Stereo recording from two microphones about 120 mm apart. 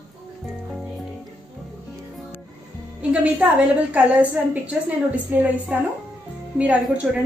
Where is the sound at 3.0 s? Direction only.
10° right (ahead or behind).